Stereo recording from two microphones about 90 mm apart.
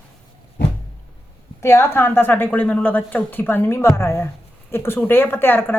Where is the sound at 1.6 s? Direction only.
25° left (ahead or behind).